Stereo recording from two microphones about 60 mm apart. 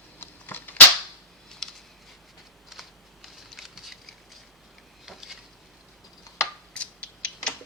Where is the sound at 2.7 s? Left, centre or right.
Centre.